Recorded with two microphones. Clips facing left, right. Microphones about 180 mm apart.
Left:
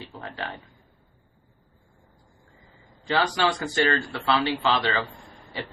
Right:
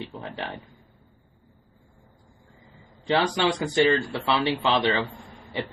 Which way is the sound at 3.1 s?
20° right (ahead or behind).